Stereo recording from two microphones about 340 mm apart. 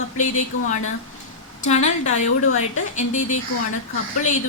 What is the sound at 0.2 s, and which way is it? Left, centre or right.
Speech, left.